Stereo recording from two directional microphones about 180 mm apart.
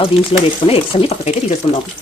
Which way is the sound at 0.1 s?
30° left (ahead or behind).